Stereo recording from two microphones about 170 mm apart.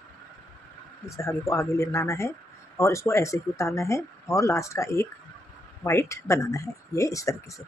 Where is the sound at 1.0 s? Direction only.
15° left (ahead or behind).